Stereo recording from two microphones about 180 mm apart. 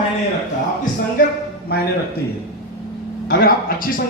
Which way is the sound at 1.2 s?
50° left (ahead or behind).